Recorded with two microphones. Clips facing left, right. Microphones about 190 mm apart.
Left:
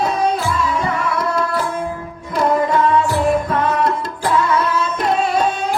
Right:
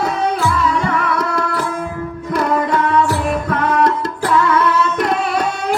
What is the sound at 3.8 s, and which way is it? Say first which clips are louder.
Tabla: right 3 dB; 65° right (ahead or behind).